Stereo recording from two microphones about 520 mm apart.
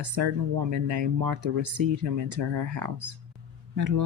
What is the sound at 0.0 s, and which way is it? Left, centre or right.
Speech, right.